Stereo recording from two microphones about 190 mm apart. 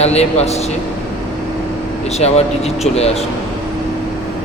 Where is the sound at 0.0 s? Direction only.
35° left (ahead or behind).